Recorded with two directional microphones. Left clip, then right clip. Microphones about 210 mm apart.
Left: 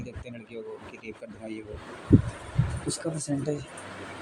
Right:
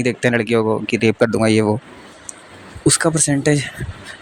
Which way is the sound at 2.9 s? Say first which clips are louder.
Right 17 dB; 55° right (ahead or behind).